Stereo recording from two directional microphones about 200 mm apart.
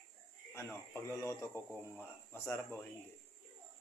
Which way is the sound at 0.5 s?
15° left (ahead or behind).